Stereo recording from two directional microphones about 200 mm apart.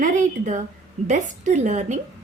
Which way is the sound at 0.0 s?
40° right (ahead or behind).